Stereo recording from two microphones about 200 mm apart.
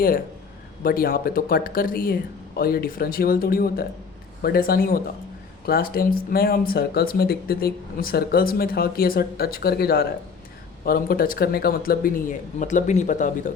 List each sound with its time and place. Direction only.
0.8 s speech: 45° left (ahead or behind)